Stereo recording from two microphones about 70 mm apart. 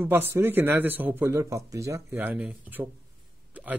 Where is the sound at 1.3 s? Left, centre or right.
Right.